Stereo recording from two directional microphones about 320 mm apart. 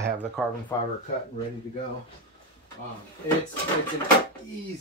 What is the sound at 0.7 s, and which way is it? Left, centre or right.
Speech, centre.